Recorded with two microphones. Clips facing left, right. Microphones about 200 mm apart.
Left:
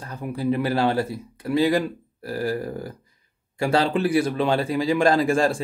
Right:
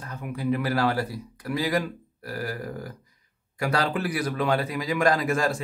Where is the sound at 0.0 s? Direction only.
30° left (ahead or behind).